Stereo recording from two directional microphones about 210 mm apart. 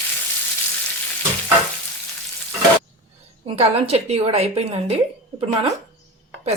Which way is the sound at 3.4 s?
30° right (ahead or behind).